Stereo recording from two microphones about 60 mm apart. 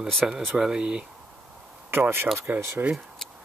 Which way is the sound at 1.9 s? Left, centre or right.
Right.